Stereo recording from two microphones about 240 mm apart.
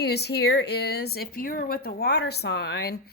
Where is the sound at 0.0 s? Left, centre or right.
Left.